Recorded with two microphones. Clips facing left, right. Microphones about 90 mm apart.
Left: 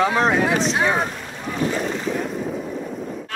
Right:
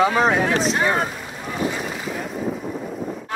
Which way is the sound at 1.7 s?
5° right (ahead or behind).